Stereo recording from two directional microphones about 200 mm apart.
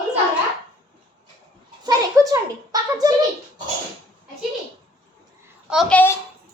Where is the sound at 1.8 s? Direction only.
20° right (ahead or behind).